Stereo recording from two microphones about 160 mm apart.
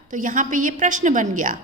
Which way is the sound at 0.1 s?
55° right (ahead or behind).